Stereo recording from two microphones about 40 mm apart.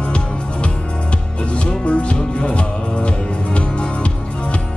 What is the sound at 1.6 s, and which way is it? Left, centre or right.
Music, left.